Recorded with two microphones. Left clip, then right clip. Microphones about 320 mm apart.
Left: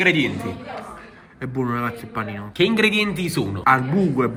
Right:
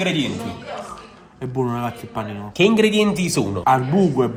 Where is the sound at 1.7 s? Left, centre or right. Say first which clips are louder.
Even; centre.